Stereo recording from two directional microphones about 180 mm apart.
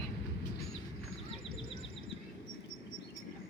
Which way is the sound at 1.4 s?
30° left (ahead or behind).